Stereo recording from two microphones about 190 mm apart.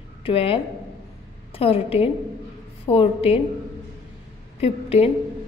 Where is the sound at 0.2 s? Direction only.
30° left (ahead or behind).